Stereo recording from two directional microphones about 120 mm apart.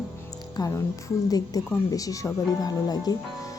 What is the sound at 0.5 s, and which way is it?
A woman's voice, 25° left (ahead or behind).